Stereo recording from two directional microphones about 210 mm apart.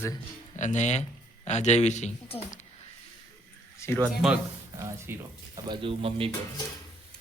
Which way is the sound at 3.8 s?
10° left (ahead or behind).